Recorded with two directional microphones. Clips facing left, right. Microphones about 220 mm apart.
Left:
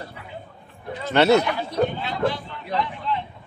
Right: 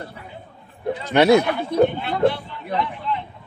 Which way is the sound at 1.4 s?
55° right (ahead or behind).